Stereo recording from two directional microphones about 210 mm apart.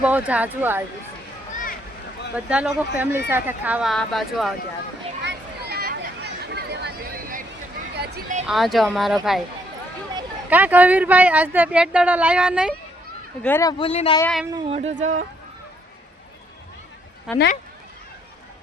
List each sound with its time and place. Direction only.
0.0 s speech: 5° right (ahead or behind)
2.3 s speech: 5° right (ahead or behind)
5.2 s a sound: 55° right (ahead or behind)
8.4 s speech: centre (ahead or behind)
10.5 s speech: 10° right (ahead or behind)
13.4 s speech: 10° left (ahead or behind)
14.2 s speech: 5° left (ahead or behind)
14.7 s speech: 30° right (ahead or behind)
17.3 s speech: 45° left (ahead or behind)